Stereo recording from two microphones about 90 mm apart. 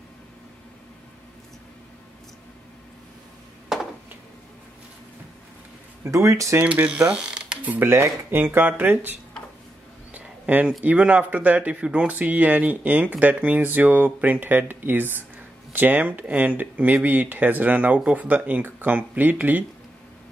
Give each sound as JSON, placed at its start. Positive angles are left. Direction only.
{"t": 3.7, "sound": "a sound", "side_deg": -5}
{"t": 6.0, "sound": "speech", "side_deg": -35}
{"t": 6.6, "sound": "speech", "side_deg": -15}
{"t": 7.6, "sound": "speech", "side_deg": -20}
{"t": 10.1, "sound": "a sound", "side_deg": -15}
{"t": 10.8, "sound": "speech", "side_deg": -15}